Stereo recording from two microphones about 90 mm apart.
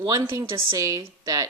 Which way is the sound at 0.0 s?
45° right (ahead or behind).